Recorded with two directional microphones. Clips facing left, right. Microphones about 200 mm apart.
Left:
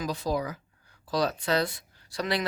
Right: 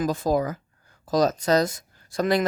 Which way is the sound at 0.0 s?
50° right (ahead or behind).